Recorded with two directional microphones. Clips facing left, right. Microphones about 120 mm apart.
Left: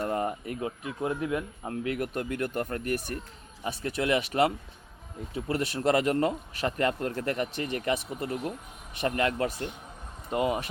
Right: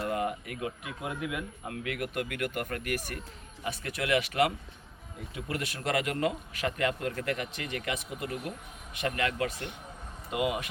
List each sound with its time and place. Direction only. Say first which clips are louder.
0.1 s speech: left 2 dB; 35° left (ahead or behind)